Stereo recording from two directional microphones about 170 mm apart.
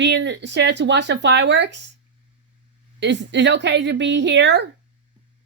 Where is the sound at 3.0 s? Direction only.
90° right.